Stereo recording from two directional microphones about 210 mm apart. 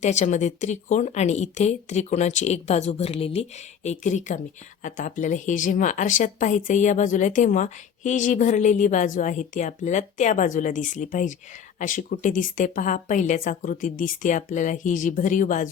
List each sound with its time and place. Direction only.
0.0 s speech: 35° left (ahead or behind)